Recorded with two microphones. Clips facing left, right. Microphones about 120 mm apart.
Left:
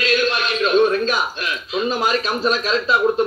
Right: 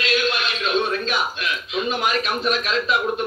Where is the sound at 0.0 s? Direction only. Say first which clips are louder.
Left 3 dB; 45° left (ahead or behind).